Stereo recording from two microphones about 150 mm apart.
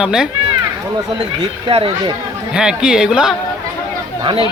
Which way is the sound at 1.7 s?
35° right (ahead or behind).